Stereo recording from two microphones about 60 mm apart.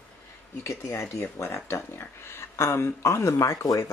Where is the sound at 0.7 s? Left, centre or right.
Left.